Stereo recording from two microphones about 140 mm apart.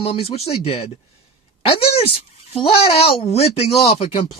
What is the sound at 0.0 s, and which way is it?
Speech, 45° left (ahead or behind).